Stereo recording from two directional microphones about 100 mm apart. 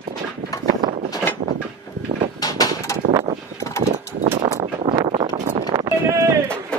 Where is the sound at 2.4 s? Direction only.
40° left (ahead or behind).